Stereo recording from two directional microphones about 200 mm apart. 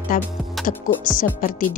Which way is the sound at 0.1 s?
45° left (ahead or behind).